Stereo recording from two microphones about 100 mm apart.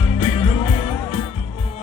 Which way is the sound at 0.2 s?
75° left (ahead or behind).